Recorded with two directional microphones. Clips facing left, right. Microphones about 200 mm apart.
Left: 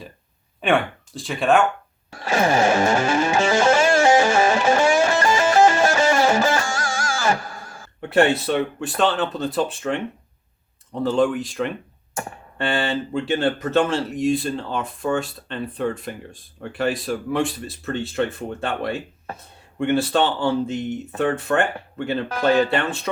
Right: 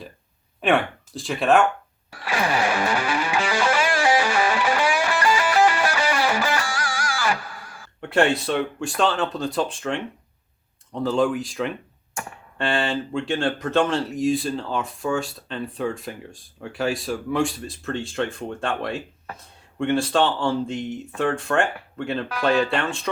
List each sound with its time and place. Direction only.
0.6 s speech: centre (ahead or behind)
2.2 s music: 45° left (ahead or behind)
7.1 s a sound: 45° left (ahead or behind)
8.1 s speech: 5° left (ahead or behind)